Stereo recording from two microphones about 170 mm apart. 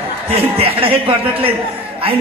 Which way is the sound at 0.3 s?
35° right (ahead or behind).